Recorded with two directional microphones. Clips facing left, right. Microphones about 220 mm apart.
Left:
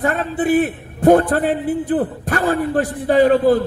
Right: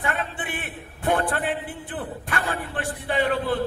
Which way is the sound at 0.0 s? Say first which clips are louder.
Left 11 dB; 40° left (ahead or behind).